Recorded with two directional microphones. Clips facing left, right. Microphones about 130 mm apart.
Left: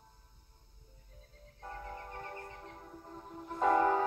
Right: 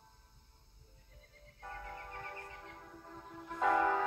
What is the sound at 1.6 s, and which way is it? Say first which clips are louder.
Music: left 2 dB; 30° left (ahead or behind).